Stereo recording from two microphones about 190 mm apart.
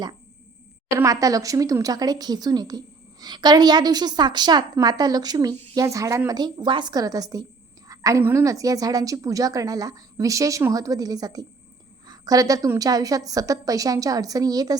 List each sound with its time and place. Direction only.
0.9 s speech: 15° right (ahead or behind)